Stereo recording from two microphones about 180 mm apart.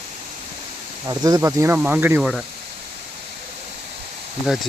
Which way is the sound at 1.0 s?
20° right (ahead or behind).